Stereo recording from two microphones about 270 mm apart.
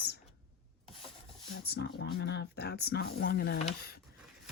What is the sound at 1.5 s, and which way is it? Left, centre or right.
Speech, left.